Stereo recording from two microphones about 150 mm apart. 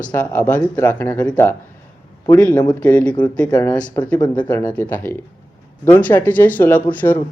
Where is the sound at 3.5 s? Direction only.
25° left (ahead or behind).